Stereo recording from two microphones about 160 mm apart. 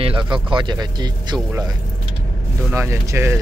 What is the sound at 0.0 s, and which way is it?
Speech, 30° right (ahead or behind).